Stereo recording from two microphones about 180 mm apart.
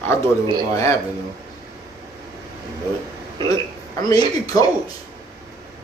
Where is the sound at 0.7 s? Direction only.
20° left (ahead or behind).